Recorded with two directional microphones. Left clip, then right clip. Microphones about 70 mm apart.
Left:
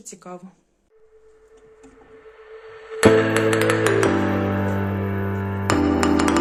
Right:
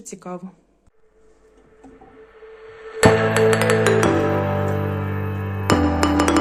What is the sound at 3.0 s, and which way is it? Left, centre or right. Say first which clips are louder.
Music: right 1 dB; centre.